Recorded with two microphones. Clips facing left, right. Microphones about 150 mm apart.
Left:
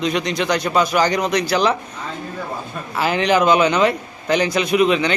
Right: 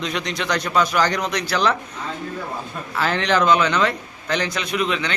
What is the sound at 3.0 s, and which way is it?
A man's voice, 10° left (ahead or behind).